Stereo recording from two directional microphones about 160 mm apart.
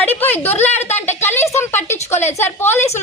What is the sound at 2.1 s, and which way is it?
Speech, 45° left (ahead or behind).